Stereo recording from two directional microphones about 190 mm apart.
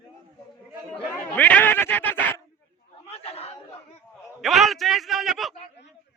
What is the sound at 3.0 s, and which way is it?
Chatter, 30° left (ahead or behind).